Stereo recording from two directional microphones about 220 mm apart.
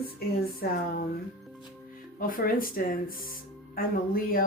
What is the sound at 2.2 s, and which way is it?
Speech, 40° left (ahead or behind).